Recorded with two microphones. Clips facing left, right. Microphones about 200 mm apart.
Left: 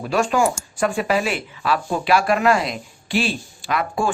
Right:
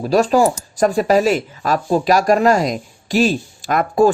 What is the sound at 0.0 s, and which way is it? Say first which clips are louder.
Speech: right 5 dB; 35° right (ahead or behind).